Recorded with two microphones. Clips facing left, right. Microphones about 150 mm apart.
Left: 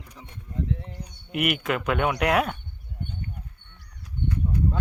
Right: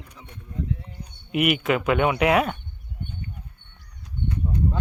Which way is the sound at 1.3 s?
Centre (ahead or behind).